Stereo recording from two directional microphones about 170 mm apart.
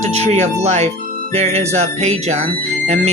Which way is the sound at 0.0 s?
40° right (ahead or behind).